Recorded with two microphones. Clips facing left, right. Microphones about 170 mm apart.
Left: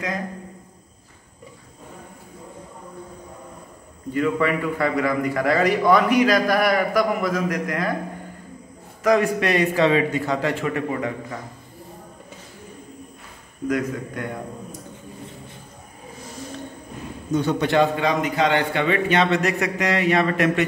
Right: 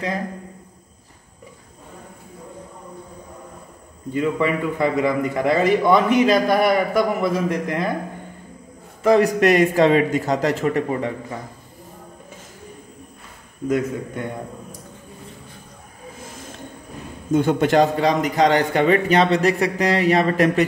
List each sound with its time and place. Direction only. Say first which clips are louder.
4.1 s a man's voice: right 1 dB; 20° right (ahead or behind)
9.0 s a man's voice: right 3 dB; 30° right (ahead or behind)
9.4 s a man's voice: right 4 dB; 45° right (ahead or behind)
17.3 s a man's voice: right 4 dB; 50° right (ahead or behind); by 20.6 s 35° right (ahead or behind)